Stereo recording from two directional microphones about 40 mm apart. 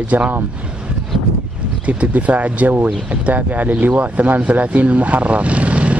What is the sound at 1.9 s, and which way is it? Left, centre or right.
Speech, right.